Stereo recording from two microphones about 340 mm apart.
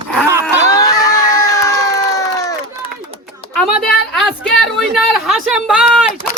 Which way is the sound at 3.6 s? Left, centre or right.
Centre.